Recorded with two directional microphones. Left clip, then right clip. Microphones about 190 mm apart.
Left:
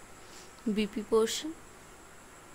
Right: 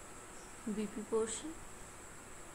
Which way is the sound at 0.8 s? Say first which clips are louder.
Left 9 dB; 55° left (ahead or behind).